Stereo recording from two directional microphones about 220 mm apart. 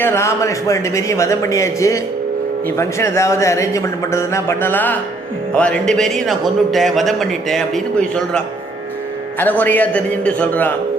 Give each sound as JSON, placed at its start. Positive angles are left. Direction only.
{"t": 0.0, "sound": "a man's voice", "side_deg": 10}